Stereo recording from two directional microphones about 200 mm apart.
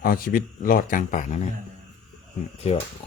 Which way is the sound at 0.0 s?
45° left (ahead or behind).